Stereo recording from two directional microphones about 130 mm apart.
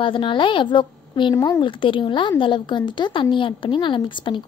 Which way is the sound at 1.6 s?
40° left (ahead or behind).